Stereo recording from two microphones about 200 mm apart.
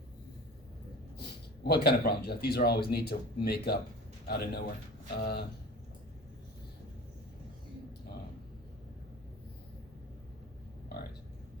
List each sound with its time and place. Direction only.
1.6 s speech: 55° left (ahead or behind)